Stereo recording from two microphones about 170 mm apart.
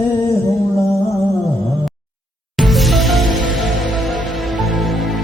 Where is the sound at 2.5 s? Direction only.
Centre (ahead or behind).